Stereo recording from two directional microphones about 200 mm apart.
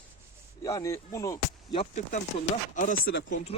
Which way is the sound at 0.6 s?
15° left (ahead or behind).